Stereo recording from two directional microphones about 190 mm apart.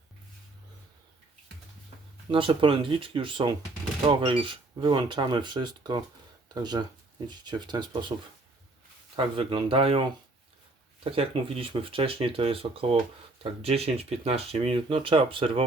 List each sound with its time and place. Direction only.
2.3 s speech: 25° right (ahead or behind)
9.1 s speech: 30° right (ahead or behind)